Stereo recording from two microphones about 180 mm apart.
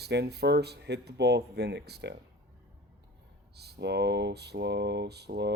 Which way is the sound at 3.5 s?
65° right (ahead or behind).